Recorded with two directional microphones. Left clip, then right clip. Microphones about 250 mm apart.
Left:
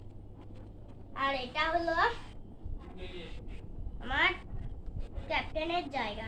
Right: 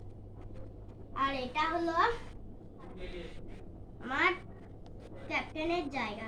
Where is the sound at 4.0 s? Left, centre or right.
Centre.